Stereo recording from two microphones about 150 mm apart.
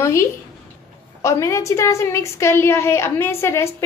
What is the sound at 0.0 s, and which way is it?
A woman's voice, 20° left (ahead or behind).